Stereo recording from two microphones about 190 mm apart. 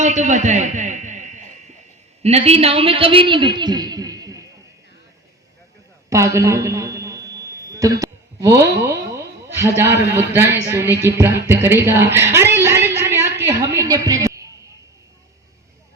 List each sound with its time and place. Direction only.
0.0 s a man's voice: 40° right (ahead or behind); by 4.4 s 20° right (ahead or behind)
6.1 s a sound: 15° right (ahead or behind)
8.9 s a man's voice: 15° right (ahead or behind)